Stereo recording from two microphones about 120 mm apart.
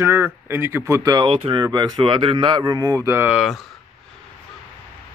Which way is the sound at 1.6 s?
35° right (ahead or behind).